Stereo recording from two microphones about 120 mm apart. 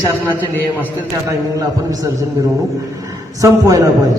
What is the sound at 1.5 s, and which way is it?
Speech, 30° right (ahead or behind).